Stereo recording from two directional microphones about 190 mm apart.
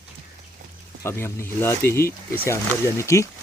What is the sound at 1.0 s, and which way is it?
Speech, 15° left (ahead or behind).